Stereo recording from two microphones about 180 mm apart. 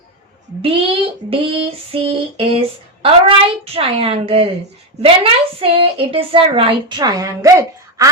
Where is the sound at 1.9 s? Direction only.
30° right (ahead or behind).